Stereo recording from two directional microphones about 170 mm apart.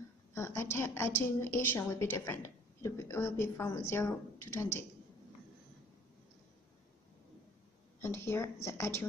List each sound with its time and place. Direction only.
0.3 s a woman's voice: 15° left (ahead or behind)
8.0 s a woman's voice: 15° left (ahead or behind)